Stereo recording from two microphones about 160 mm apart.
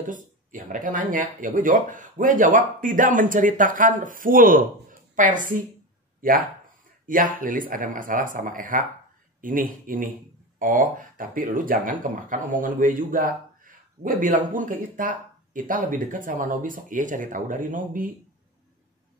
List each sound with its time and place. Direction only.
0.0 s a woman's voice: 55° right (ahead or behind)